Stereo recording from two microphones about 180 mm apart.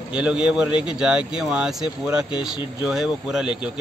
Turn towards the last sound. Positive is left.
turn(degrees=-5)  # may be behind; listen again after turning